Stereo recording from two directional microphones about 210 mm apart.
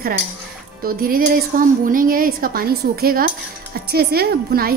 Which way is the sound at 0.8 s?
45° right (ahead or behind).